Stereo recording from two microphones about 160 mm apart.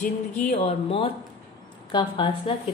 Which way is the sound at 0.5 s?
35° left (ahead or behind).